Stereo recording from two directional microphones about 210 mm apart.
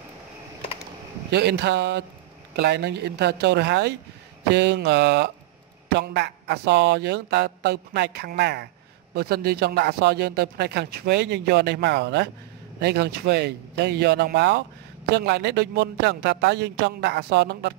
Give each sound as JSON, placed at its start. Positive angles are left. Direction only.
{"t": 1.3, "sound": "speech", "side_deg": -55}